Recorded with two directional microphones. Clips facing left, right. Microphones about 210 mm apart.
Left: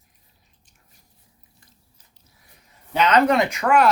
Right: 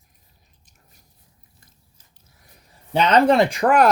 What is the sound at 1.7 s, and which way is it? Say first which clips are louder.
Biting: left 1 dB; 50° right (ahead or behind).